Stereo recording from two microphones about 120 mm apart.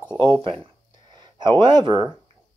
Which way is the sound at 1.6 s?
40° right (ahead or behind).